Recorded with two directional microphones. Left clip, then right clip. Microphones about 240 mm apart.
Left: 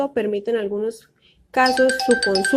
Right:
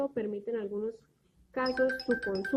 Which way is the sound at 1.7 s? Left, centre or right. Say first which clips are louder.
Left 12 dB; centre.